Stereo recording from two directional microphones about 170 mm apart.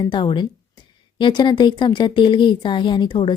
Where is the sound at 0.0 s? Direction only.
30° left (ahead or behind).